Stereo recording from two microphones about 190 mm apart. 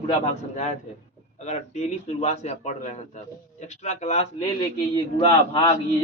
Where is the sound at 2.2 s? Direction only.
35° left (ahead or behind).